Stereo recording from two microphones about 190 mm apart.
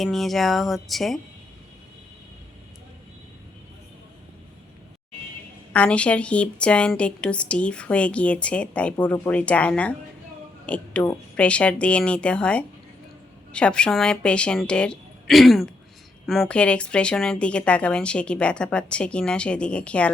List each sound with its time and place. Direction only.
0.0 s speech: centre (ahead or behind)
5.7 s a woman's voice: 5° left (ahead or behind)